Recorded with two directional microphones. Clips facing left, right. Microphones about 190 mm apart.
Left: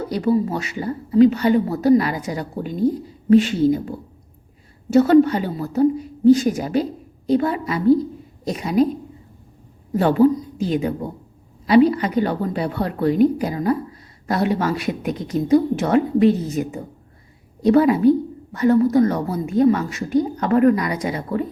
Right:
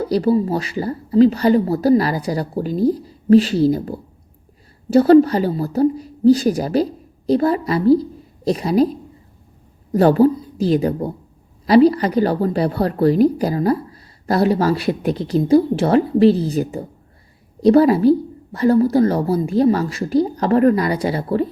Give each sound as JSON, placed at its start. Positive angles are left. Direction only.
{"t": 0.0, "sound": "a woman's voice", "side_deg": -35}
{"t": 9.9, "sound": "a woman's voice", "side_deg": -40}